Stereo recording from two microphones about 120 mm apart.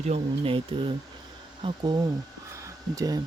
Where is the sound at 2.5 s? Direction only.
25° right (ahead or behind).